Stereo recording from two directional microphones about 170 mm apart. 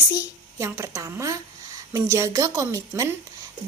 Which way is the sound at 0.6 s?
15° right (ahead or behind).